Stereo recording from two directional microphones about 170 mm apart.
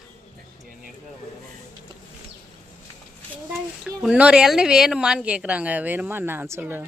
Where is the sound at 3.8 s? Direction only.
5° right (ahead or behind).